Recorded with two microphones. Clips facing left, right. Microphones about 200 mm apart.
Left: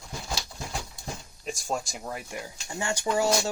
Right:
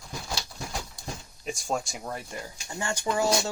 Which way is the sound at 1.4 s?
Centre (ahead or behind).